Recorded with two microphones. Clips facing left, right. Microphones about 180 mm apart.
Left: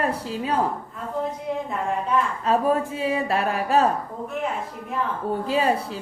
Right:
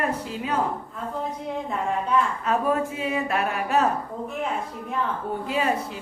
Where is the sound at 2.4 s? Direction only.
35° left (ahead or behind).